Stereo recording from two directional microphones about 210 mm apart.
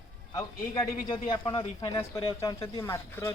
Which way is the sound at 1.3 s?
20° left (ahead or behind).